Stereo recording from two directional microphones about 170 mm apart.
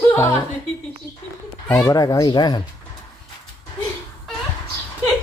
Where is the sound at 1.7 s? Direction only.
20° left (ahead or behind).